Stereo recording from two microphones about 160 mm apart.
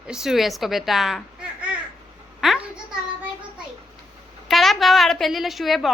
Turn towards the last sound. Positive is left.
turn(degrees=0)  # may be behind; listen again after turning